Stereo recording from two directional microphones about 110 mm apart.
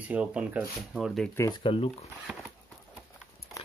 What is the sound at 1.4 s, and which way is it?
Speech, 50° left (ahead or behind).